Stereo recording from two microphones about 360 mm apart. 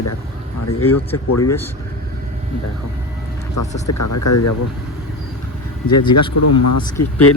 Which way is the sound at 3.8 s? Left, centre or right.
Left.